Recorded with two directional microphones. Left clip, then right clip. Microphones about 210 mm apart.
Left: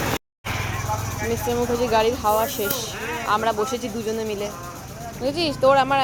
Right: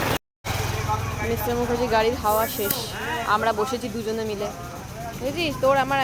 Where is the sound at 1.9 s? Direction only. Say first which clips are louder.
Left 1 dB; 5° left (ahead or behind).